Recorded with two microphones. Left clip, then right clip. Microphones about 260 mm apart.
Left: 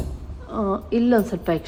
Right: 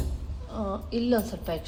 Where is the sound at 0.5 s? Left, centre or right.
Left.